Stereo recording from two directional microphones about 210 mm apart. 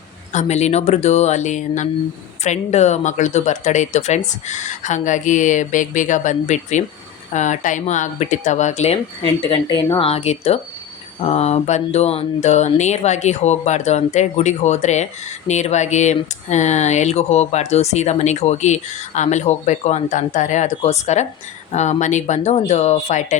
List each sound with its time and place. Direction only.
0.3 s speech: 30° left (ahead or behind)
9.5 s a woman's voice: 15° left (ahead or behind)
10.0 s speech: 30° left (ahead or behind)